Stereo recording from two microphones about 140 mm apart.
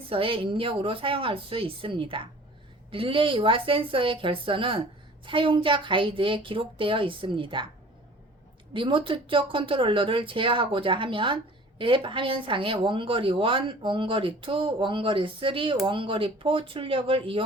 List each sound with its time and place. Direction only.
0.1 s a woman's voice: 40° right (ahead or behind)
8.7 s a woman's voice: 35° right (ahead or behind)